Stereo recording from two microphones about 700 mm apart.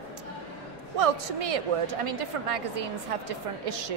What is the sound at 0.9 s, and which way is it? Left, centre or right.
A woman's voice, right.